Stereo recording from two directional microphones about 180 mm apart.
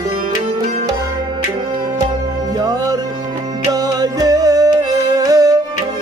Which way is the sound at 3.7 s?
20° right (ahead or behind).